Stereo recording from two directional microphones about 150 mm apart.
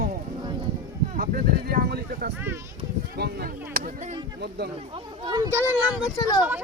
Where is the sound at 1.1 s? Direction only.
85° right.